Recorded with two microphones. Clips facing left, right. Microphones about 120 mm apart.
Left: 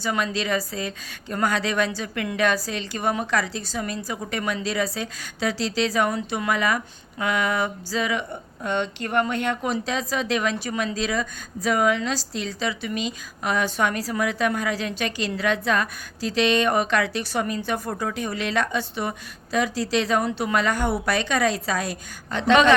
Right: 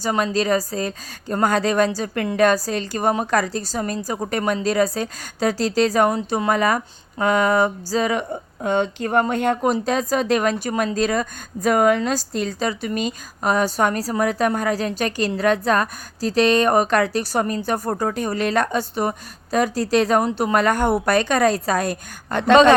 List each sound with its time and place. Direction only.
0.0 s a woman's voice: 35° right (ahead or behind)